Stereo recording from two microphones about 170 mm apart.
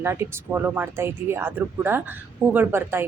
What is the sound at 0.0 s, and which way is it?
A woman's voice, 15° right (ahead or behind).